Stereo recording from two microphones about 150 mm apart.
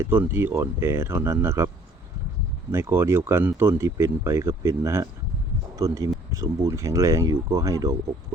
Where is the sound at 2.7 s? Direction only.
15° right (ahead or behind).